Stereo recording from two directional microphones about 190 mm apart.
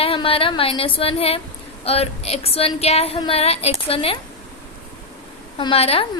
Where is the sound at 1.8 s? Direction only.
30° left (ahead or behind).